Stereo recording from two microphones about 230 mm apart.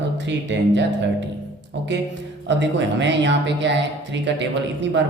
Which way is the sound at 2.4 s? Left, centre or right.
Right.